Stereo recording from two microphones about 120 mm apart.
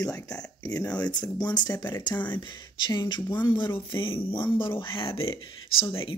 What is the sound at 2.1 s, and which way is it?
Speech, 15° left (ahead or behind).